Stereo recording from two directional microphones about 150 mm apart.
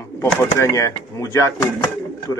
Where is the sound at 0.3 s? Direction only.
15° left (ahead or behind).